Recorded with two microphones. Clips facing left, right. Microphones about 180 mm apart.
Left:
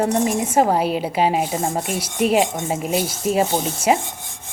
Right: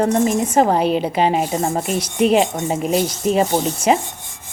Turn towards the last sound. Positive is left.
turn(degrees=5)  # may be behind; listen again after turning